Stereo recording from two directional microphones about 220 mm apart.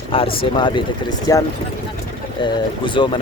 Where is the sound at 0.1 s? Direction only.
25° left (ahead or behind).